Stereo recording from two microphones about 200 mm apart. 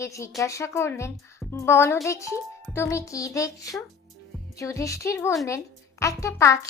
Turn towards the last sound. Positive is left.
turn(degrees=15)  # may be behind; listen again after turning